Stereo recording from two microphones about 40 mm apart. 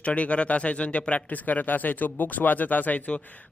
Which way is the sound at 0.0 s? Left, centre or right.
Left.